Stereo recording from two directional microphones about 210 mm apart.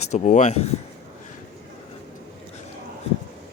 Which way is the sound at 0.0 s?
35° left (ahead or behind).